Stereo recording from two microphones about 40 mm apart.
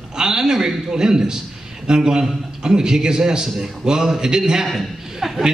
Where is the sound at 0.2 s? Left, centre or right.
Centre.